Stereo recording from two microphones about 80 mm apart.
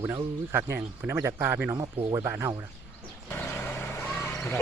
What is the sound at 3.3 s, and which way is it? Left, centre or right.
Vehicle, left.